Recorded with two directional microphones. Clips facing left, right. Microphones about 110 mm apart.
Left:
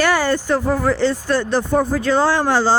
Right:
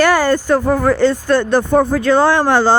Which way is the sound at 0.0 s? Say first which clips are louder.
Right 4 dB; 45° right (ahead or behind).